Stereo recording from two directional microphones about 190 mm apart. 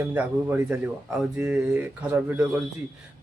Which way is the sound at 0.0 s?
10° right (ahead or behind).